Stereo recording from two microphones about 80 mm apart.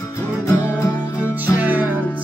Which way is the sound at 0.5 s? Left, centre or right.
Left.